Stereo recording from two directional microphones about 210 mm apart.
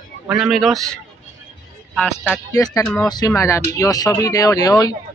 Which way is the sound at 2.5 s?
15° left (ahead or behind).